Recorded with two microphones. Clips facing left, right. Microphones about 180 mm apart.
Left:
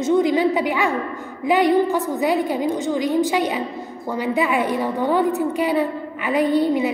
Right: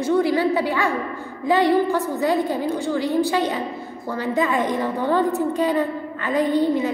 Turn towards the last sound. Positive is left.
turn(degrees=15)  # may be behind; listen again after turning